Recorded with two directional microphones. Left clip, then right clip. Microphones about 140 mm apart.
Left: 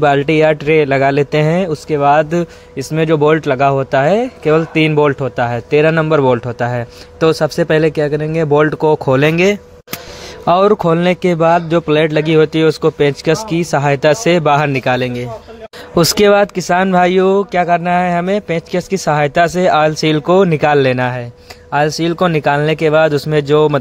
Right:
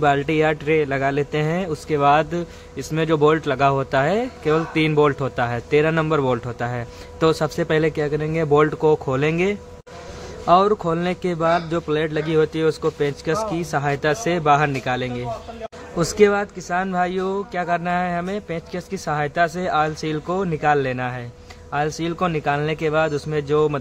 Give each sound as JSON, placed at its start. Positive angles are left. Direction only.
{"t": 0.0, "sound": "speech", "side_deg": 45}
{"t": 1.7, "sound": "speech", "side_deg": 25}
{"t": 2.3, "sound": "a man's voice", "side_deg": 40}
{"t": 10.4, "sound": "a man's voice", "side_deg": 60}
{"t": 16.0, "sound": "speech", "side_deg": 90}
{"t": 17.6, "sound": "a man's voice", "side_deg": 45}
{"t": 21.7, "sound": "speech", "side_deg": 45}